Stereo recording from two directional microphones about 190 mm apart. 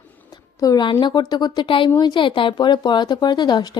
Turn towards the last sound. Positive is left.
turn(degrees=20)  # may be behind; listen again after turning